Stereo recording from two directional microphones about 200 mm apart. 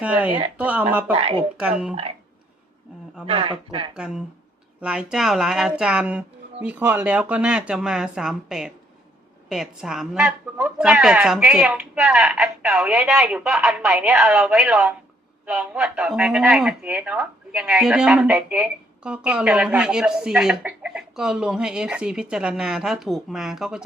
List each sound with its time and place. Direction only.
0.0 s speech: 5° right (ahead or behind)
1.1 s speech: 30° right (ahead or behind)
1.5 s speech: 5° right (ahead or behind)
3.2 s speech: 25° right (ahead or behind)
3.9 s speech: 5° right (ahead or behind)